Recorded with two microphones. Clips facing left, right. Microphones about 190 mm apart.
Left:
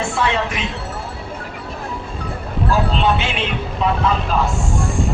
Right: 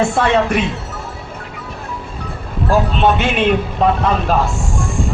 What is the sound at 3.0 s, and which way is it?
Speech, 50° right (ahead or behind).